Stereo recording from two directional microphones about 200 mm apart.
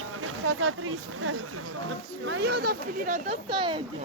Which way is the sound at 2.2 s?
60° right (ahead or behind).